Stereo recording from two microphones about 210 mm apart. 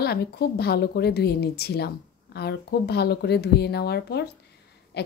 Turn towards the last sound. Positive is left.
turn(degrees=50)  # may be behind; listen again after turning